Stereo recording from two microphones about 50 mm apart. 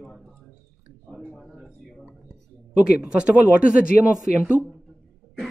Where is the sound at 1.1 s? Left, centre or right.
Centre.